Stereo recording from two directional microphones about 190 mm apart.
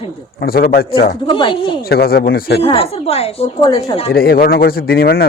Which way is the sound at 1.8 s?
55° left (ahead or behind).